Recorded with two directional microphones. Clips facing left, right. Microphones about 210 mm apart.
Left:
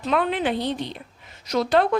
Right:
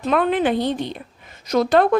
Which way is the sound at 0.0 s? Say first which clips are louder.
Right 4 dB; 50° right (ahead or behind).